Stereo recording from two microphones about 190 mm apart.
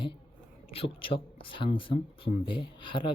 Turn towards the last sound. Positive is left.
turn(degrees=25)  # may be behind; listen again after turning